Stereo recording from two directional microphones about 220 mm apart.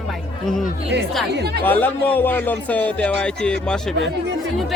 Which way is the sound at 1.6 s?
10° left (ahead or behind).